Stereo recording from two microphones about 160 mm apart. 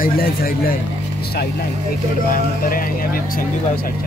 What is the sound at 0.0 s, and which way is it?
Speech, 65° left (ahead or behind).